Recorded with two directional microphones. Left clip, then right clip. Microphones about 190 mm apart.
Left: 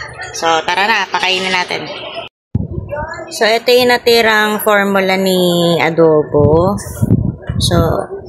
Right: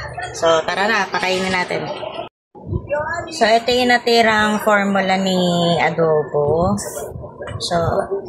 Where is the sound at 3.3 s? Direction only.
50° left (ahead or behind).